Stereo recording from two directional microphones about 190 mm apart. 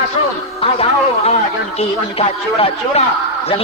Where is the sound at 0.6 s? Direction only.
30° left (ahead or behind).